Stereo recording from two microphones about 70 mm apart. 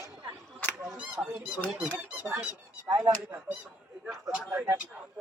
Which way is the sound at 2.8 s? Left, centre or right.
Right.